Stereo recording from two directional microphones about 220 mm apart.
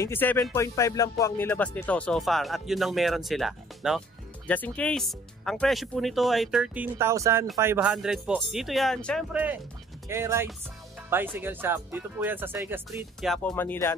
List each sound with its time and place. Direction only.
0.0 s music: 10° left (ahead or behind)
10.0 s speech: 15° right (ahead or behind); by 13.9 s 10° left (ahead or behind)